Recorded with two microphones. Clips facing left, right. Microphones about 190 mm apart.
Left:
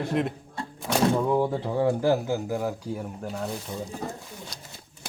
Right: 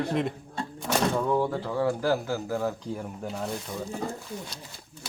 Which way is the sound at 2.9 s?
Centre (ahead or behind).